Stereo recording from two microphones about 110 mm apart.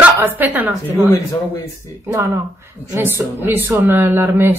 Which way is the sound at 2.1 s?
25° right (ahead or behind).